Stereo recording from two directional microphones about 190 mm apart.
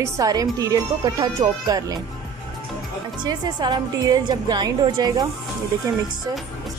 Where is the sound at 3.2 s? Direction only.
25° right (ahead or behind).